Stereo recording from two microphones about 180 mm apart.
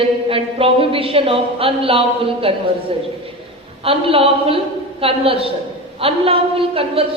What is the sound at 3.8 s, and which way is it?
A man's voice, 30° right (ahead or behind).